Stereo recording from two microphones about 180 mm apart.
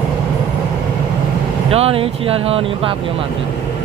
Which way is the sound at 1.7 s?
35° right (ahead or behind).